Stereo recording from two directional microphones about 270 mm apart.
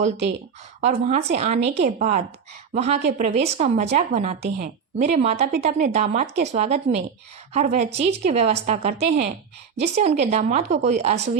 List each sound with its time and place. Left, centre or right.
0.8 s a woman's voice: right